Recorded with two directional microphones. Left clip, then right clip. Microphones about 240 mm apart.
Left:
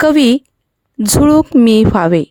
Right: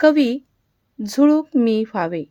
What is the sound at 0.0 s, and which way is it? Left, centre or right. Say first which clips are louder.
A woman's voice: left 5 dB; left.